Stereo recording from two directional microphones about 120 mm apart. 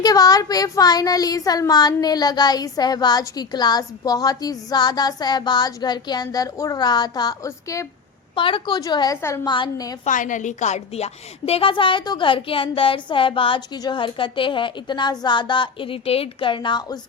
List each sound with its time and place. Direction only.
0.0 s a woman's voice: 30° left (ahead or behind)
8.4 s a woman's voice: 45° left (ahead or behind)
8.8 s a woman's voice: 35° left (ahead or behind)
9.5 s a woman's voice: 35° left (ahead or behind)
10.0 s a woman's voice: 90° left; by 17.0 s 40° left (ahead or behind)